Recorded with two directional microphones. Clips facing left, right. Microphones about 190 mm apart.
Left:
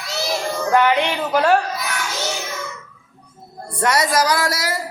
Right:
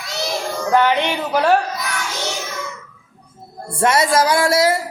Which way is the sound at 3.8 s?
25° right (ahead or behind).